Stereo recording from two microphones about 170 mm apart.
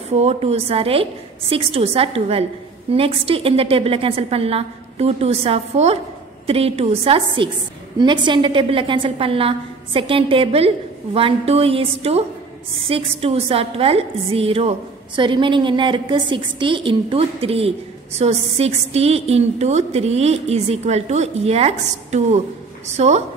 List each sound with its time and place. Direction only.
0.1 s a woman's voice: 35° right (ahead or behind)